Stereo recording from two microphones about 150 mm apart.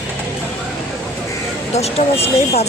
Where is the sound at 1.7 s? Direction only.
45° left (ahead or behind).